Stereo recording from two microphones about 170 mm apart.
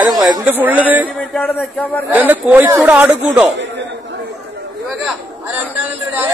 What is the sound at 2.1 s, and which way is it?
Speech, 10° right (ahead or behind).